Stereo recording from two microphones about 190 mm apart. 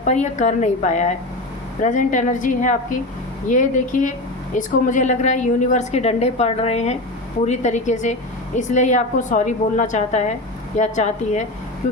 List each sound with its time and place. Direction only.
0.0 s a woman's voice: 40° left (ahead or behind)